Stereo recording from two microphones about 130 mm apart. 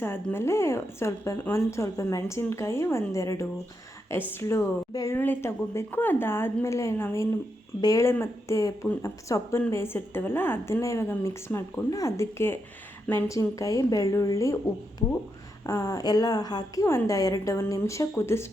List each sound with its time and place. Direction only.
0.0 s a woman's voice: 20° left (ahead or behind)
15.6 s a woman's voice: 25° left (ahead or behind)